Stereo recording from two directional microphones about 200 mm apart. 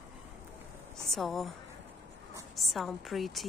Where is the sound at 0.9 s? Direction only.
Centre (ahead or behind).